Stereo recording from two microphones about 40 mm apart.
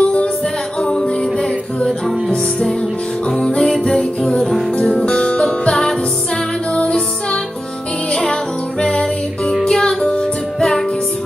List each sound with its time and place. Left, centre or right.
0.0 s music: left
3.3 s music: centre
4.7 s music: left
9.0 s music: centre